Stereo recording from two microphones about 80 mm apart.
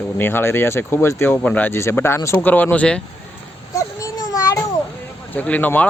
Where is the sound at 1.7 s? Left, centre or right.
Left; by 3.0 s centre.